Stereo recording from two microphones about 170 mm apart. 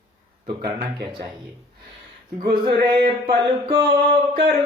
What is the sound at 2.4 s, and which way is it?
Mantra, 25° right (ahead or behind).